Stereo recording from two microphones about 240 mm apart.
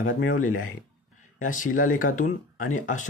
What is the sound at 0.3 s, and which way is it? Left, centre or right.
Speech, left.